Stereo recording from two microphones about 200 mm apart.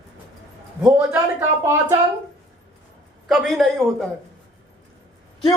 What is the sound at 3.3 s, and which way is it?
Speech, centre (ahead or behind).